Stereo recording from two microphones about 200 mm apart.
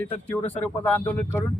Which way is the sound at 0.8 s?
10° left (ahead or behind).